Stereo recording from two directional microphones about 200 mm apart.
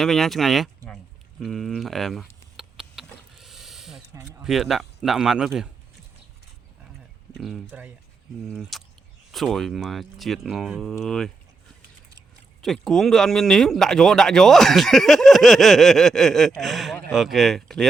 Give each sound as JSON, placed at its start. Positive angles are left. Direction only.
{"t": 0.0, "sound": "speech", "side_deg": 0}
{"t": 1.4, "sound": "a sound", "side_deg": 0}
{"t": 4.1, "sound": "speech", "side_deg": -15}
{"t": 4.4, "sound": "speech", "side_deg": 0}
{"t": 7.3, "sound": "speech", "side_deg": 0}
{"t": 12.6, "sound": "speech", "side_deg": 0}